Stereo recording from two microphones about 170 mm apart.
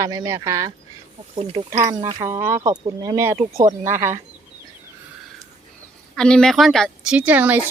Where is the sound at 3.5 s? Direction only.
50° right (ahead or behind).